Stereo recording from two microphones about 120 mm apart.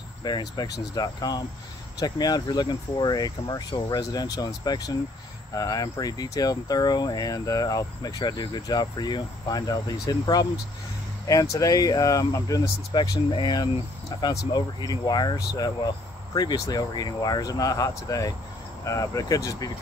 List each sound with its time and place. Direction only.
0.2 s speech: 35° left (ahead or behind)